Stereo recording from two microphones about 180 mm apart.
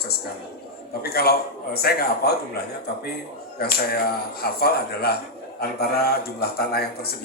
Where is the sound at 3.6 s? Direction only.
60° left (ahead or behind).